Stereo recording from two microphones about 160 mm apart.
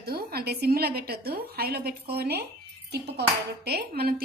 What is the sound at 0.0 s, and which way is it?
Speech, 75° right (ahead or behind).